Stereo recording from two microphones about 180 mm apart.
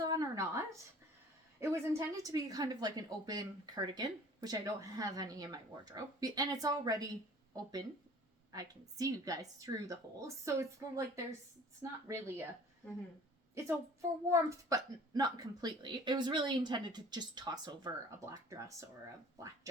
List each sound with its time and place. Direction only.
0.0 s a sound: 20° right (ahead or behind)
1.6 s a woman's voice: 15° right (ahead or behind)
14.3 s a woman's voice: 20° right (ahead or behind)